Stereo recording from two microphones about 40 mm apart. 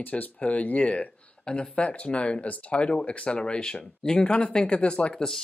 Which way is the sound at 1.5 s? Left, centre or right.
Left.